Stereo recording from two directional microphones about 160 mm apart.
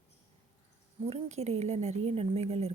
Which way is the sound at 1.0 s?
40° right (ahead or behind).